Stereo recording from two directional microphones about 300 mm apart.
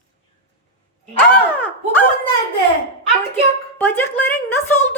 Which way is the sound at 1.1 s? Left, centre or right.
Centre.